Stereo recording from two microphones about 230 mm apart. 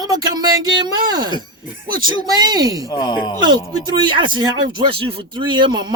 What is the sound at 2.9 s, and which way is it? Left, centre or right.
Speech, centre.